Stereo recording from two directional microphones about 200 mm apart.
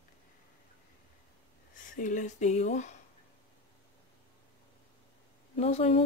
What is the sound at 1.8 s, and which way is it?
Speech, 40° left (ahead or behind).